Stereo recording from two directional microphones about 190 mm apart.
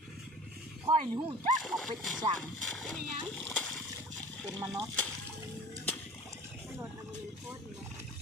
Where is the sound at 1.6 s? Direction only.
Centre (ahead or behind).